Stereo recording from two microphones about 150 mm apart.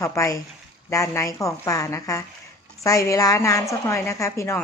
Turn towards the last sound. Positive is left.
turn(degrees=20)  # may be behind; listen again after turning